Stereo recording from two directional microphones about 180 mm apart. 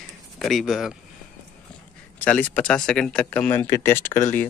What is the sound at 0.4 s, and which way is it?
Speech, centre (ahead or behind).